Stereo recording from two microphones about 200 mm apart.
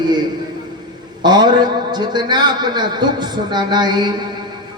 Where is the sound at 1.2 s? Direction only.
20° right (ahead or behind).